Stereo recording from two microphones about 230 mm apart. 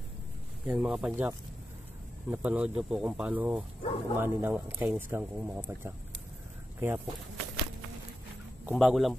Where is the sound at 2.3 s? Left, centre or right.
Centre.